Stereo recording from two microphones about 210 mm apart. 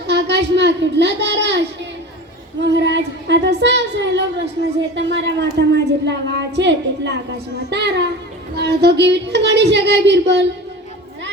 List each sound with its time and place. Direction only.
0.1 s a child's voice: 55° right (ahead or behind)